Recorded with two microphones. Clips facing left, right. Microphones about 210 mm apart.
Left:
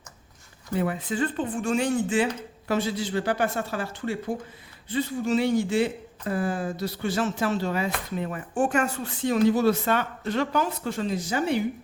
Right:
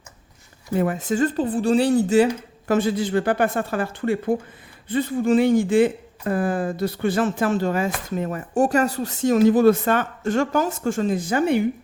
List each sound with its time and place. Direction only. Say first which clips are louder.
0.7 s speech: right 5 dB; 45° right (ahead or behind)
2.6 s speech: right 6 dB; 50° right (ahead or behind)